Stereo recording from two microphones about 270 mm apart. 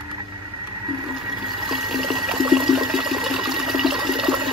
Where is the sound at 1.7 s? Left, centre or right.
Centre.